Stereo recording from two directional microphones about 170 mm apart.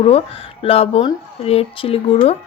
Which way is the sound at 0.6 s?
35° left (ahead or behind).